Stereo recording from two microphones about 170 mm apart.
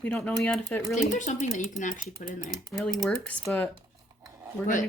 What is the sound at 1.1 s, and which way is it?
Speech, 45° left (ahead or behind).